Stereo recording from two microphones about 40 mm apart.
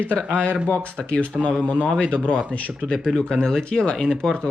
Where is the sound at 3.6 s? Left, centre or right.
Left.